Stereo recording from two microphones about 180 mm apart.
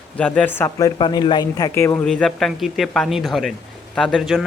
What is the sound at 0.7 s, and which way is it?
A man's voice, 20° left (ahead or behind).